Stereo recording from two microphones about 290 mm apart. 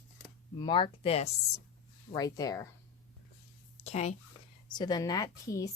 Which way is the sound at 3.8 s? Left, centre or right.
Left.